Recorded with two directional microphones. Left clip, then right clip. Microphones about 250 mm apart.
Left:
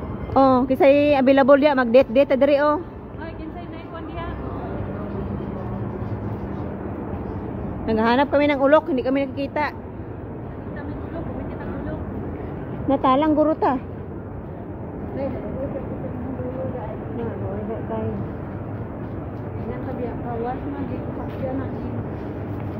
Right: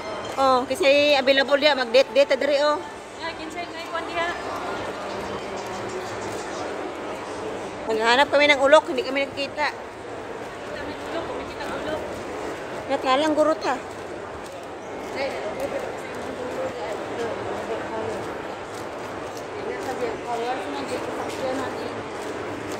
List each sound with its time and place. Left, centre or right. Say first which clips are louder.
0.4 s speech: left 4 dB; left
8.0 s speech: right 1 dB; centre
12.9 s speech: left 3 dB; centre